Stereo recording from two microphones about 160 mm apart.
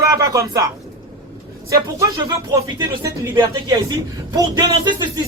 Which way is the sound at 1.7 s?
20° right (ahead or behind).